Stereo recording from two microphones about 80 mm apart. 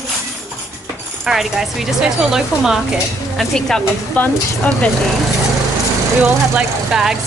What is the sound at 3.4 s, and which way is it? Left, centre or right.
Speech, centre.